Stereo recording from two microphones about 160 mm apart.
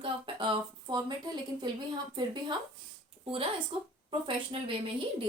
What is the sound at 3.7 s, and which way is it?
Speech, 35° right (ahead or behind).